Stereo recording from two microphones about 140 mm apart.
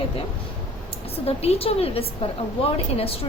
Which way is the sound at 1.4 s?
45° left (ahead or behind).